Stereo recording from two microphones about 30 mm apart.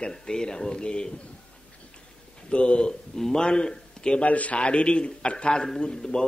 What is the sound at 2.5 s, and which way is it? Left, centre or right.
Speech, left.